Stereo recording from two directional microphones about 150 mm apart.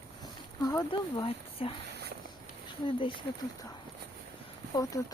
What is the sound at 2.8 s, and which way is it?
Speech, 35° left (ahead or behind).